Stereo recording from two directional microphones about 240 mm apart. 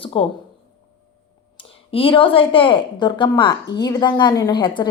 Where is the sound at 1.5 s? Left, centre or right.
Left.